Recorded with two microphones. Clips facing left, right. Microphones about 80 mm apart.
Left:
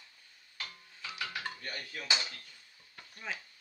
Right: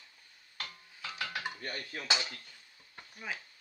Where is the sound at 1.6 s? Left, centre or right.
Right.